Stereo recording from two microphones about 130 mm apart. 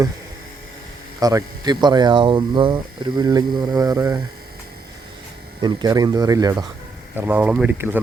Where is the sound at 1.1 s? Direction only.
30° right (ahead or behind).